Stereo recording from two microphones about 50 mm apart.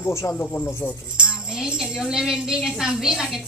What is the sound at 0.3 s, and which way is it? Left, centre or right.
Speech, left.